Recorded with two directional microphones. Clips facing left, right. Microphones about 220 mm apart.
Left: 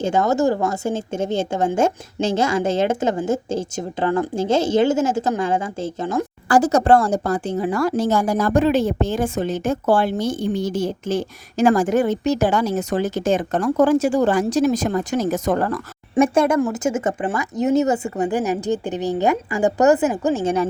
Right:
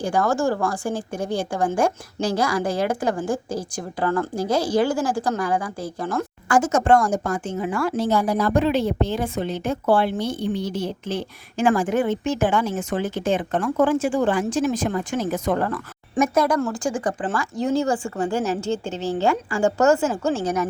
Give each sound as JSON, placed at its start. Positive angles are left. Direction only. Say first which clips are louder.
{"t": 0.0, "sound": "a woman's voice", "louder": "left 3 dB", "side_deg": 20}
{"t": 6.5, "sound": "a woman's voice", "louder": "left 3 dB", "side_deg": 35}
{"t": 16.1, "sound": "a woman's voice", "louder": "left 4 dB", "side_deg": 30}